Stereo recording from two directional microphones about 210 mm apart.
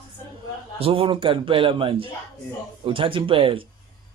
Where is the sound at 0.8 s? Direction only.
25° right (ahead or behind).